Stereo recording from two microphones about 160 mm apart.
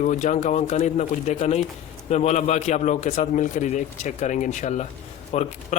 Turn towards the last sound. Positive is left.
turn(degrees=45)  # may be behind; listen again after turning